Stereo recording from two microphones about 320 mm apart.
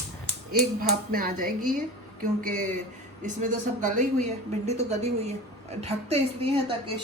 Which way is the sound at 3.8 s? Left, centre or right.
Right.